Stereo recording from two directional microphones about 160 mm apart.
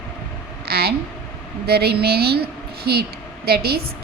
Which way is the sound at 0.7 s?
75° right (ahead or behind).